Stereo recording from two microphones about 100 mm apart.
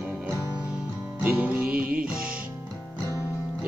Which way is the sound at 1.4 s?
15° right (ahead or behind).